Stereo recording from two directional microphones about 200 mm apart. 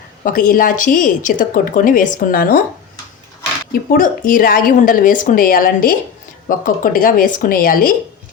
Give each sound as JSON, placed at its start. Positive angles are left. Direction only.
{"t": 0.3, "sound": "a woman's voice", "side_deg": 45}
{"t": 3.7, "sound": "a woman's voice", "side_deg": 45}